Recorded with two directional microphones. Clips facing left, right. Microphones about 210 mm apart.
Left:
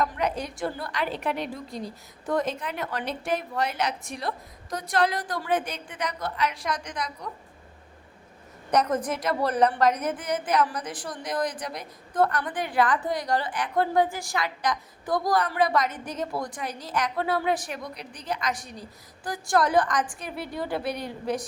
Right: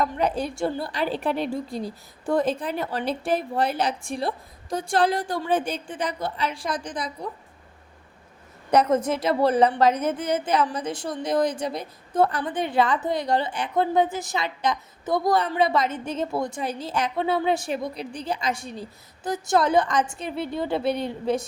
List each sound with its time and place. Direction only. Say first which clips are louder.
0.0 s a woman's voice: right 3 dB; 30° right (ahead or behind)
8.7 s a woman's voice: right 4 dB; 25° right (ahead or behind)